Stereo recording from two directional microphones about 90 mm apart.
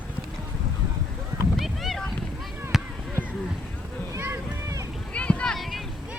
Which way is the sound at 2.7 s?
5° right (ahead or behind).